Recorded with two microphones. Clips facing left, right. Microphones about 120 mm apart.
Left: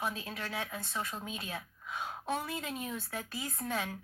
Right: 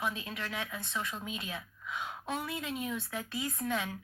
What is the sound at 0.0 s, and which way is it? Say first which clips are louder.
A woman's voice: right 1 dB; 40° left (ahead or behind).